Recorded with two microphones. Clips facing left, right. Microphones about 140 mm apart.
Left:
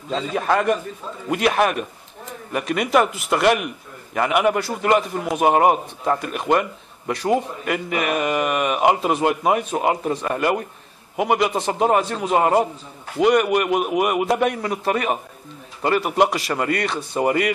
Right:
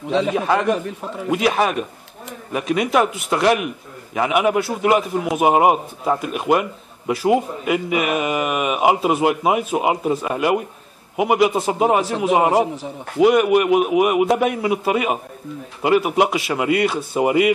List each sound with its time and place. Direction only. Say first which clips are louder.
0.3 s a man's voice: left 3 dB; centre (ahead or behind)
0.7 s a man's voice: right 5 dB; 75° right (ahead or behind)
1.3 s a man's voice: even; centre (ahead or behind)